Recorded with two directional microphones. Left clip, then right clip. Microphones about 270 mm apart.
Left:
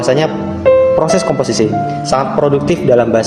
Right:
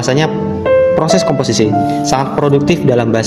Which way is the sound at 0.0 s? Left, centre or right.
Right.